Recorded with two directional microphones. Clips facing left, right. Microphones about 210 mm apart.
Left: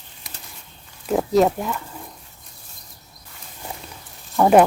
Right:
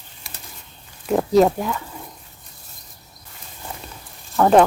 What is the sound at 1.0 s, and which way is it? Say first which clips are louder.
Speech: right 2 dB; centre (ahead or behind).